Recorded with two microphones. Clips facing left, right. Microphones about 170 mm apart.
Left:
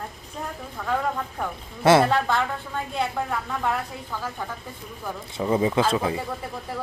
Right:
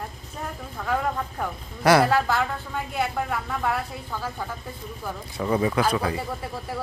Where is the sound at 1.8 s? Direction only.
25° left (ahead or behind).